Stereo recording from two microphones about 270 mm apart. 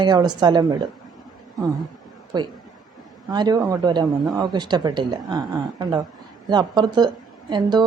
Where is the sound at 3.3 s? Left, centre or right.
Centre.